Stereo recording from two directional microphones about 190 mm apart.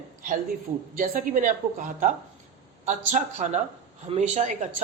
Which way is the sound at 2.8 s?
40° right (ahead or behind).